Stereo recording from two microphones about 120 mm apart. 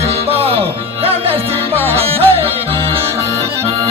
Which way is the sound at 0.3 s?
55° right (ahead or behind).